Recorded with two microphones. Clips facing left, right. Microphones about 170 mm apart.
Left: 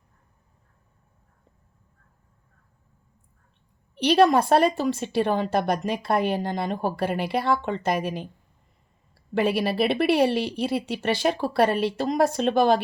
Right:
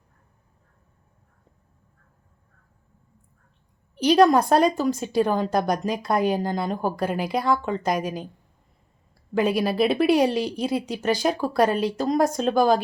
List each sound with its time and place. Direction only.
3.9 s a woman's voice: centre (ahead or behind)
9.3 s a woman's voice: centre (ahead or behind)